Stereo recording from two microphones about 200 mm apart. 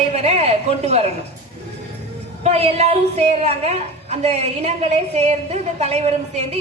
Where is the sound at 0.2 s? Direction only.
30° right (ahead or behind).